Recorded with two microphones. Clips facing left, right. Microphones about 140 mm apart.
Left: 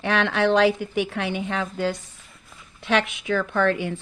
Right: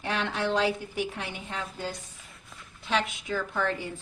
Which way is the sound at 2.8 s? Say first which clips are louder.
Left 6 dB; 70° left (ahead or behind).